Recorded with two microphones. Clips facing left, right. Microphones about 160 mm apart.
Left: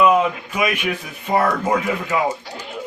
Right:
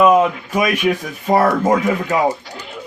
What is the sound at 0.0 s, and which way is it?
A man's voice, 40° right (ahead or behind).